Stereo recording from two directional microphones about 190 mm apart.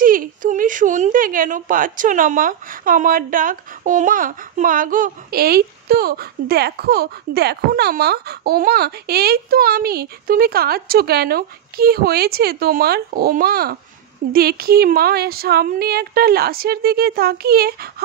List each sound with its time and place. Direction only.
0.0 s a woman's voice: 45° right (ahead or behind)